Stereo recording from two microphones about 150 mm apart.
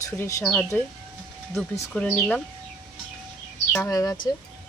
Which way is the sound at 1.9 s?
10° left (ahead or behind).